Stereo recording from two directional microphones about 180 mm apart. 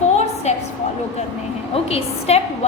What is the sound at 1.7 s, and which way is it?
Speech, 35° left (ahead or behind).